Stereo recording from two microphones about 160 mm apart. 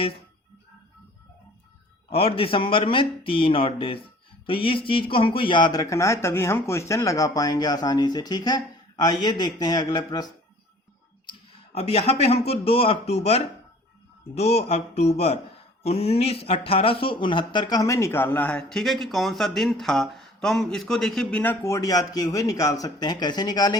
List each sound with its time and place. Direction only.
2.0 s speech: 35° left (ahead or behind)
11.3 s speech: 40° left (ahead or behind)